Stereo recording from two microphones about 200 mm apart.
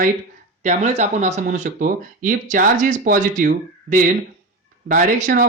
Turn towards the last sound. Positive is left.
turn(degrees=-45)  # may be behind; listen again after turning